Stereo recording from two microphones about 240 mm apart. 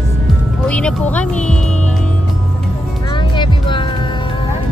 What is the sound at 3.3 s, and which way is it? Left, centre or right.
Music, centre.